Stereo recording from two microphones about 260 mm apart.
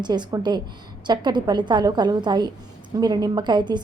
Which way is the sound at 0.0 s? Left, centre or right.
Centre.